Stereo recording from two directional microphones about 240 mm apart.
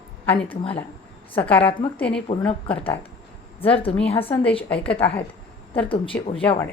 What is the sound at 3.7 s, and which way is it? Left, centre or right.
Speech, left.